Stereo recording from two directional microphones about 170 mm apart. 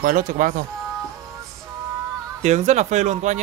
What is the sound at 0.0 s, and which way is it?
Speech, 55° right (ahead or behind).